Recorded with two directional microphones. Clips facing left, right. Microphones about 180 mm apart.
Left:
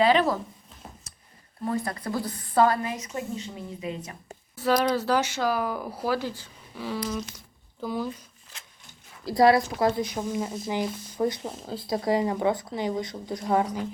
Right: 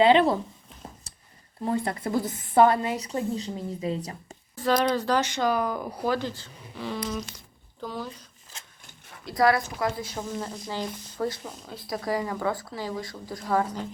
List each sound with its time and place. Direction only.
0.0 s a woman's voice: 25° right (ahead or behind)
1.1 s a sound: 35° right (ahead or behind)
1.6 s a woman's voice: 25° right (ahead or behind)
4.5 s speech: 5° left (ahead or behind)
9.2 s speech: 25° left (ahead or behind)
11.4 s speech: 30° left (ahead or behind)